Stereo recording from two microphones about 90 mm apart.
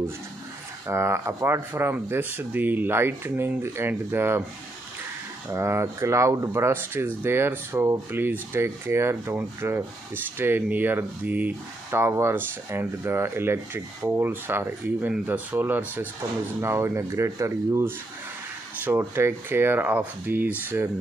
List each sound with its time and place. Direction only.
0.8 s speech: 30° right (ahead or behind)
5.5 s speech: 30° right (ahead or behind)